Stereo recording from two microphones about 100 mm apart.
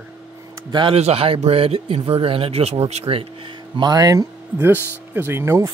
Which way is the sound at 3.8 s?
40° right (ahead or behind).